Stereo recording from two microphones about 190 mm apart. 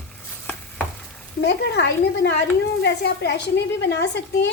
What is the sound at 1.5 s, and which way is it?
A woman's voice, 65° left (ahead or behind).